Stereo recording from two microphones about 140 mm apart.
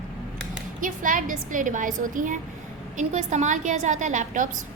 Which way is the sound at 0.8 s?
70° right (ahead or behind).